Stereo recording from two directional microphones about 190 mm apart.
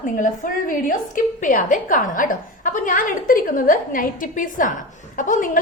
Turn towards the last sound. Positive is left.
turn(degrees=45)  # may be behind; listen again after turning